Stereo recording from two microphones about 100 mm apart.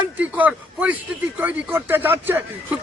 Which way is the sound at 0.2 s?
15° right (ahead or behind).